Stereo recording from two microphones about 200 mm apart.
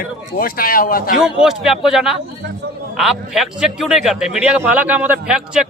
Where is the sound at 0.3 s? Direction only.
45° left (ahead or behind).